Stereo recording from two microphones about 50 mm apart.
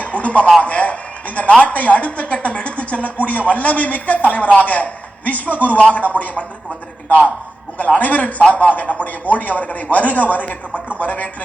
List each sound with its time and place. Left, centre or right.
0.0 s a man's voice: left
7.8 s a woman's voice: left